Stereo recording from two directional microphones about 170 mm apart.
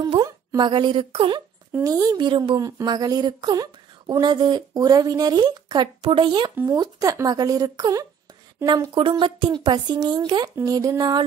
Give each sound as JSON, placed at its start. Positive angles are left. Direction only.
{"t": 0.0, "sound": "speech", "side_deg": -20}
{"t": 1.7, "sound": "speech", "side_deg": -20}